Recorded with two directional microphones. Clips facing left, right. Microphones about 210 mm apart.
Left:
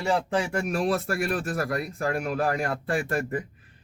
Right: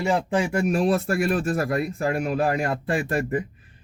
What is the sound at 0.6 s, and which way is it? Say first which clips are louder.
Speech: right 4 dB; 25° right (ahead or behind).